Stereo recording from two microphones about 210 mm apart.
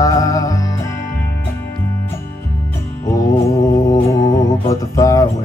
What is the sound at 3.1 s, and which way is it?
Music, 15° left (ahead or behind).